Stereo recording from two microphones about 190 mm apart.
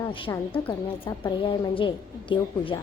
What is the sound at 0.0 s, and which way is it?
Speech, 20° left (ahead or behind).